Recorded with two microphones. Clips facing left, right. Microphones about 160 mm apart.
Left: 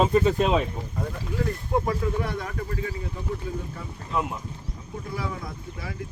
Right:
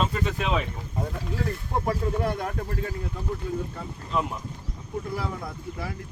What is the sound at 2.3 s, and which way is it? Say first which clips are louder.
Speech: right 3 dB; 50° right (ahead or behind).